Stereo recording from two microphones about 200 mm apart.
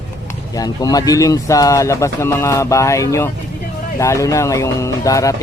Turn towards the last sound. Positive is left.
turn(degrees=15)  # may be behind; listen again after turning